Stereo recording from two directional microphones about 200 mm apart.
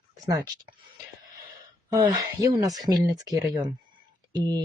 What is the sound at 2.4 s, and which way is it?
Speech, 15° right (ahead or behind).